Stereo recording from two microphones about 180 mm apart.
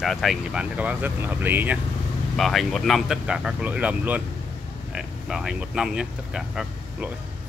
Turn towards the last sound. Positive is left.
turn(degrees=-5)  # may be behind; listen again after turning